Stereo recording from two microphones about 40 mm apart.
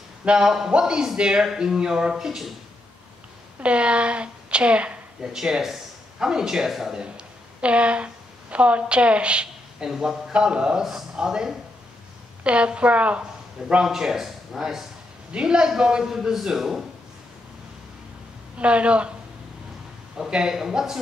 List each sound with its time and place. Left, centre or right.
0.2 s a woman's voice: right
1.4 s speech: centre
3.6 s a woman's voice: right
5.2 s speech: centre
7.0 s a woman's voice: right
9.8 s speech: centre
10.3 s a woman's voice: right
10.8 s speech: centre
12.4 s a woman's voice: right
13.8 s speech: centre
15.3 s a woman's voice: right; by 16.8 s centre
18.6 s a woman's voice: right
20.2 s a woman's voice: right
20.5 s speech: centre